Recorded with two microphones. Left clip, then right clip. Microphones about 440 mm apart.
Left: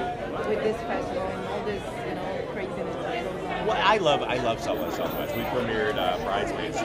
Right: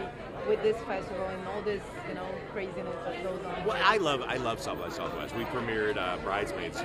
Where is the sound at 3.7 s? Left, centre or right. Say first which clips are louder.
Left 4 dB; right.